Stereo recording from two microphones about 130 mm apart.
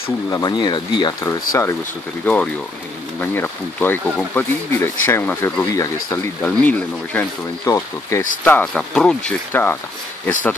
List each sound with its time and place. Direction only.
0.3 s speech: 35° left (ahead or behind)
1.2 s speech: 25° left (ahead or behind)
2.2 s speech: 10° left (ahead or behind)
7.6 s speech: 20° left (ahead or behind)
8.5 s speech: 10° left (ahead or behind)
9.5 s speech: 15° left (ahead or behind)